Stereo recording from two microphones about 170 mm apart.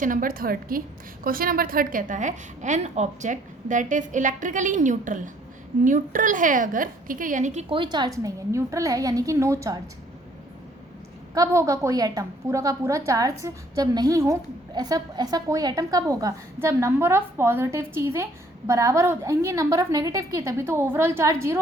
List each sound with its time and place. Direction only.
0.0 s a woman's voice: 55° right (ahead or behind)
7.7 s a woman's voice: 30° right (ahead or behind)
11.3 s a woman's voice: 20° right (ahead or behind)